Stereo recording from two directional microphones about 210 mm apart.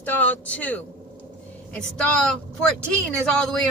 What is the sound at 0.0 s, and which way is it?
Speech, 10° left (ahead or behind).